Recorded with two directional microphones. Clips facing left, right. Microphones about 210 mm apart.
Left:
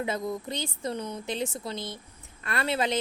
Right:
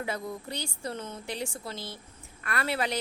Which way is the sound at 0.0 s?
20° left (ahead or behind).